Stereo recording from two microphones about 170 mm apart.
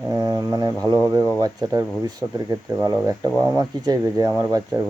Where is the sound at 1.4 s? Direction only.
20° right (ahead or behind).